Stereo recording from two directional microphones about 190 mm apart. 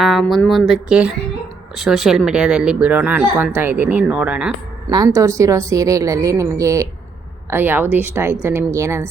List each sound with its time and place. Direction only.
0.0 s speech: centre (ahead or behind)
4.9 s a woman's voice: 20° right (ahead or behind)